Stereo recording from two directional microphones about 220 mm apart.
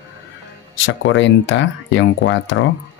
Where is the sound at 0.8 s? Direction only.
55° left (ahead or behind).